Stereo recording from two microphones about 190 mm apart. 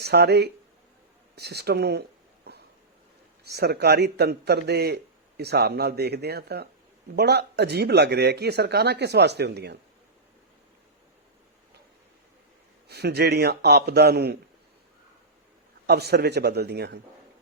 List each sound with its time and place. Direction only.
0.0 s speech: 60° right (ahead or behind)
12.9 s speech: 60° right (ahead or behind)
15.9 s speech: 60° right (ahead or behind)